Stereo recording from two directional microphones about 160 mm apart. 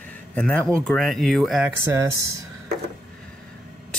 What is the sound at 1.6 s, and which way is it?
Speech, 15° right (ahead or behind).